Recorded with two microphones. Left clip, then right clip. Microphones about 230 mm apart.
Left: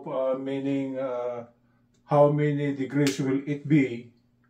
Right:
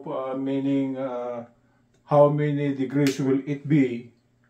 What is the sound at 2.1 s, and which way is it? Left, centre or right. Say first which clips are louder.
Mantra: right 2 dB; right.